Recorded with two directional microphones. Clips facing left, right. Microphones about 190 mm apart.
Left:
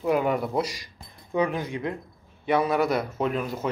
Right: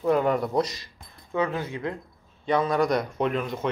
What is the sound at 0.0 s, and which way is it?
Speech, 5° left (ahead or behind).